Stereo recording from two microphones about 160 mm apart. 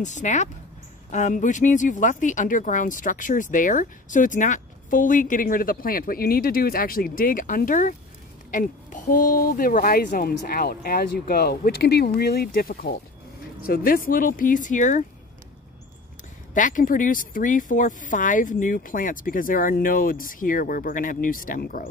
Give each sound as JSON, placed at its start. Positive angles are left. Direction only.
{"t": 0.2, "sound": "speech", "side_deg": 50}
{"t": 16.5, "sound": "speech", "side_deg": 55}